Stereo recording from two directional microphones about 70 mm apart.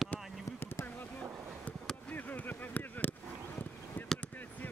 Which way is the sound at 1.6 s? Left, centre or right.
Centre.